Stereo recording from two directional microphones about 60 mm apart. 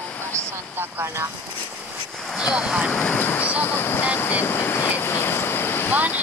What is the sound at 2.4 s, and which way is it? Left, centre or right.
Speech, centre.